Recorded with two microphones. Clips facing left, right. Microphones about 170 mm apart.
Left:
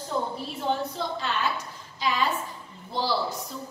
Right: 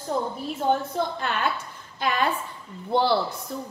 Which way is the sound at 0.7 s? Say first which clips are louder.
Right 4 dB; 55° right (ahead or behind).